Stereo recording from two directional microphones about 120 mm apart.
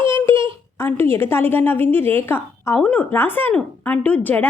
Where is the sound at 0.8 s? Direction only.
20° left (ahead or behind).